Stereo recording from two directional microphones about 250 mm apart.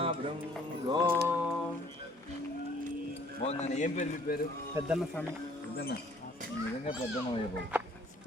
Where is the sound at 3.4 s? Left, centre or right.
Left.